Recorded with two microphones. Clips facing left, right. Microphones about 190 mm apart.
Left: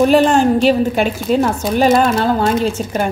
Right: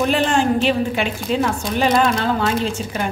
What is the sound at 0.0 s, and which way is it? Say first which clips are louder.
A woman's voice: left 7 dB; 40° left (ahead or behind).